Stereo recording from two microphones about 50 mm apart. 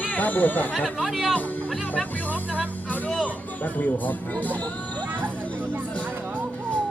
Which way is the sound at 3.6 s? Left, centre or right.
Left.